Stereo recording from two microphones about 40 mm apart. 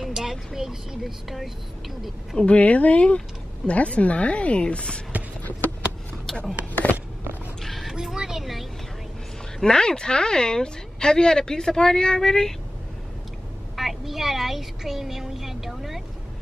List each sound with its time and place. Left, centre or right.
0.0 s vehicle: centre
0.5 s speech: centre
2.3 s speech: left
6.7 s a sound: left
7.6 s a sound: centre
7.9 s speech: centre
9.6 s a woman's voice: centre
13.7 s speech: centre